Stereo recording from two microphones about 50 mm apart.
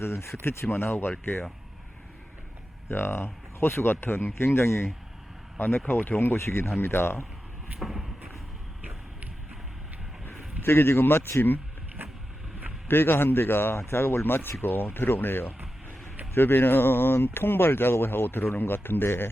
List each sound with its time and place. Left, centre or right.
0.0 s speech: left
0.4 s speech: left
2.9 s speech: left
5.5 s speech: left
7.8 s a sound: centre
10.2 s speech: left
12.0 s vehicle: right
12.9 s speech: left